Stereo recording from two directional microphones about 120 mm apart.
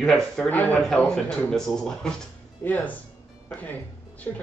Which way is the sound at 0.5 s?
15° left (ahead or behind).